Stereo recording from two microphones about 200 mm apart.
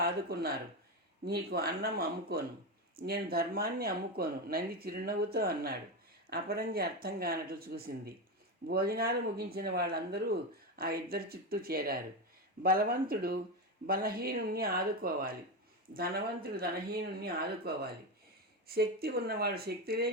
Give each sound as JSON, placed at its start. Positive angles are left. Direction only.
{"t": 0.0, "sound": "speech", "side_deg": -50}